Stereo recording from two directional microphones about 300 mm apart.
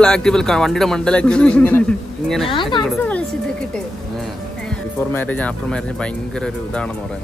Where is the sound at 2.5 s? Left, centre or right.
Centre.